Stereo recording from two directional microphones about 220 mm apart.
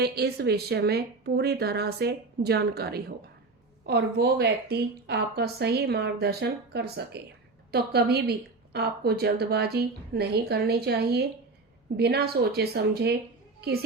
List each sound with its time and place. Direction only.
0.0 s a woman's voice: 45° right (ahead or behind)